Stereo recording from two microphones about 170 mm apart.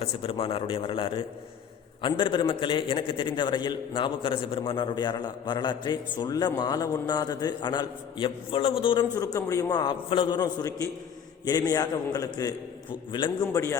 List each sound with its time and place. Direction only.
0.0 s a man's voice: 30° left (ahead or behind)